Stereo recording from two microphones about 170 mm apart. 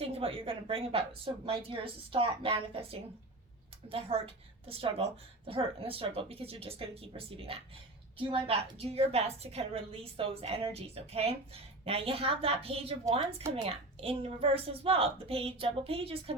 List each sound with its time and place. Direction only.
0.1 s a woman's voice: 30° right (ahead or behind)